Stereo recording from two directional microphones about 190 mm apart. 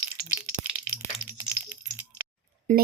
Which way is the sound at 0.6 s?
40° left (ahead or behind).